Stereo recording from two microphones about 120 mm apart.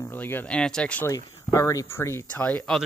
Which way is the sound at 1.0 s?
25° left (ahead or behind).